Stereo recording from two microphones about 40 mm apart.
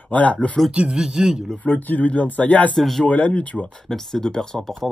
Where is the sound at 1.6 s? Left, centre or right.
Left.